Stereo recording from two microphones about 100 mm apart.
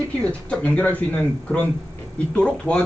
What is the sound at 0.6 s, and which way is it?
Speech, 15° left (ahead or behind).